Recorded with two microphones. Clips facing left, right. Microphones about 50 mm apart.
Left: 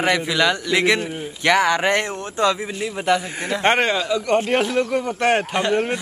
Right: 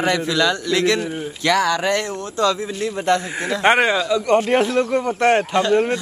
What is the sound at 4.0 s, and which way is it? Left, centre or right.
Speech, left.